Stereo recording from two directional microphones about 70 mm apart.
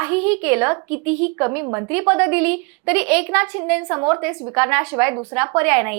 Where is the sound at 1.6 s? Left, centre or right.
Right.